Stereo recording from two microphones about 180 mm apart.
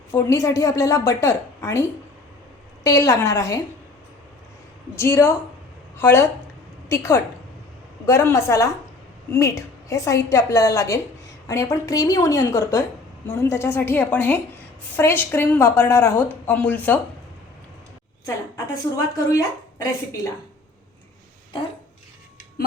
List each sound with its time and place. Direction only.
0.1 s a woman's voice: 15° left (ahead or behind)
4.9 s a woman's voice: 15° left (ahead or behind)
18.5 s a woman's voice: 15° left (ahead or behind)